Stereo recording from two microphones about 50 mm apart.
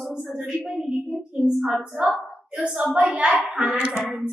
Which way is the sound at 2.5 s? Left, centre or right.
Right.